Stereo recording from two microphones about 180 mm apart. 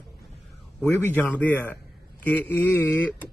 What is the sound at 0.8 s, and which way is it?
Speech, 10° left (ahead or behind).